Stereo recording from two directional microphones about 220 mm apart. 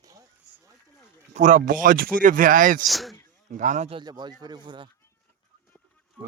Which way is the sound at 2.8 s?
Centre (ahead or behind).